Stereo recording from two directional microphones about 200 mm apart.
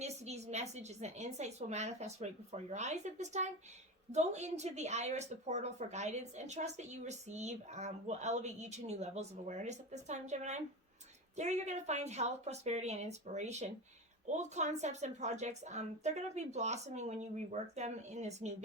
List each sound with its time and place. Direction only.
0.0 s speech: 35° right (ahead or behind)